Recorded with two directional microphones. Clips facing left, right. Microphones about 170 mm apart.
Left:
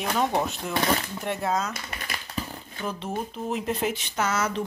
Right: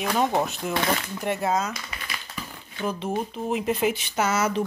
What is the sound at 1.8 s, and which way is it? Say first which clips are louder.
Typewriter: left 1 dB; 40° left (ahead or behind).